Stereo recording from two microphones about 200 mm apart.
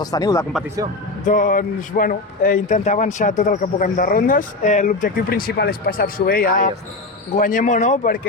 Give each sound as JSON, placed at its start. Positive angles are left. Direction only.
{"t": 0.0, "sound": "speech", "side_deg": 20}
{"t": 1.2, "sound": "a man's voice", "side_deg": 40}